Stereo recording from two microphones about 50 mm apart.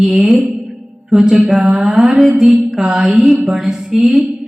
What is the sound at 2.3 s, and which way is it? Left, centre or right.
Mantra, right.